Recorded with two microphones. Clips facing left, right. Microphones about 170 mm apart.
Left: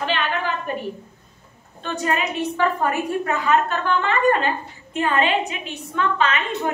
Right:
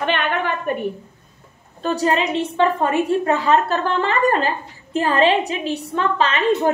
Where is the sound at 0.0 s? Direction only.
60° right (ahead or behind).